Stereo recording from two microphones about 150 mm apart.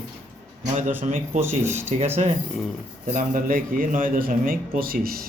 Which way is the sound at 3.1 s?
65° right (ahead or behind).